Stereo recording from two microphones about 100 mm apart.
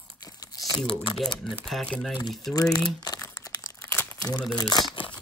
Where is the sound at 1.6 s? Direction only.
10° left (ahead or behind).